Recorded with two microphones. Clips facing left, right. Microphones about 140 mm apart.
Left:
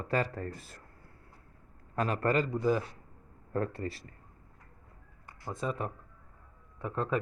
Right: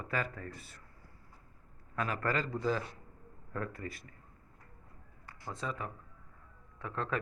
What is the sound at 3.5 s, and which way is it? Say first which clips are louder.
Speech: left 6 dB; 30° left (ahead or behind).